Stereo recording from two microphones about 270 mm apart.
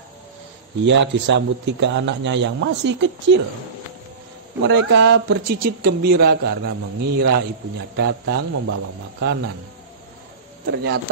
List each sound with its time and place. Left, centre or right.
0.8 s speech: right
4.6 s speech: right
10.7 s speech: right